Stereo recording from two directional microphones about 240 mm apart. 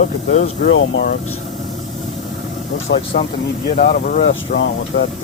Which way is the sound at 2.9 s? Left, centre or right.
Left.